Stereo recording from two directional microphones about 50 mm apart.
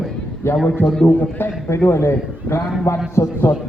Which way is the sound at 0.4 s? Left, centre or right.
Left.